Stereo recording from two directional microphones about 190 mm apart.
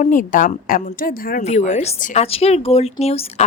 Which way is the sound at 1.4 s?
40° left (ahead or behind).